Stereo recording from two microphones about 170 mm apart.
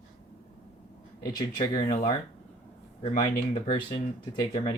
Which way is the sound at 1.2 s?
25° left (ahead or behind).